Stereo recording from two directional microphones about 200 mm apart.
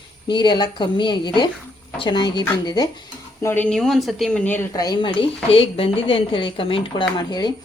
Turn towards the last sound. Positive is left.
turn(degrees=20)  # may be behind; listen again after turning